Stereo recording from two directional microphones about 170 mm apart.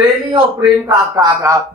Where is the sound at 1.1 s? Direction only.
20° right (ahead or behind).